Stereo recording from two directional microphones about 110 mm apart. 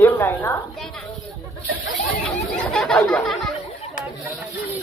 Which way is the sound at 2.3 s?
5° left (ahead or behind).